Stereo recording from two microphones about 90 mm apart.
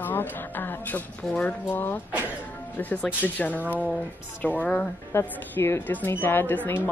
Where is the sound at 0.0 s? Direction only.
20° left (ahead or behind).